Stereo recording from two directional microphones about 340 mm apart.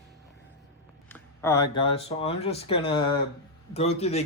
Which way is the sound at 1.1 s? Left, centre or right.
Centre.